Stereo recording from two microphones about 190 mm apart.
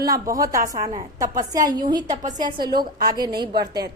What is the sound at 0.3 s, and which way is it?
A woman's voice, 15° right (ahead or behind).